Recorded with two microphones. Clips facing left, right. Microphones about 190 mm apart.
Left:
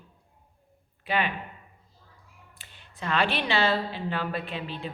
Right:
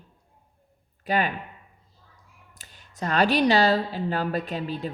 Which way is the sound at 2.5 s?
40° right (ahead or behind).